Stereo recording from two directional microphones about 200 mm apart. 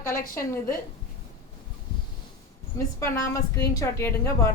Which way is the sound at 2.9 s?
15° left (ahead or behind).